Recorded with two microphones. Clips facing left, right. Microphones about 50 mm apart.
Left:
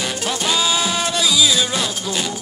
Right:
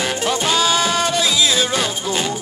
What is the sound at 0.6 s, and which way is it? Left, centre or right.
Music, right.